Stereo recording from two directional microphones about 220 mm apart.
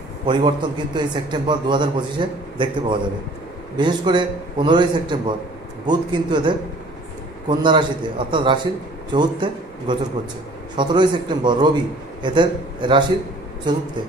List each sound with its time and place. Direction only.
0.3 s a man's voice: 20° right (ahead or behind)